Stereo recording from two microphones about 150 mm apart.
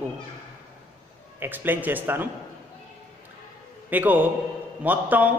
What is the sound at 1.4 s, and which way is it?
Speech, 15° right (ahead or behind).